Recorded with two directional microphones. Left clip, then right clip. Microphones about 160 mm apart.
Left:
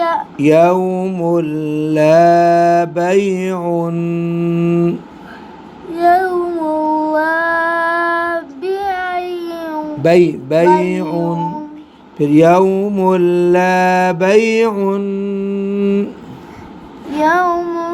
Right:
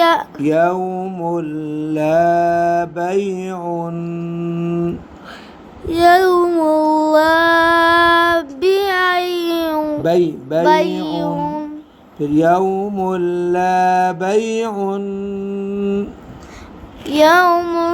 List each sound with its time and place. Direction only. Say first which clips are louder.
0.0 s a sound: right 3 dB; 90° right
0.3 s mantra: left 5 dB; 30° left (ahead or behind)
5.9 s child singing: right 1 dB; 90° right
10.0 s speech: left 6 dB; 30° left (ahead or behind)
12.2 s mantra: left 4 dB; 30° left (ahead or behind)
17.2 s child singing: right 3 dB; 90° right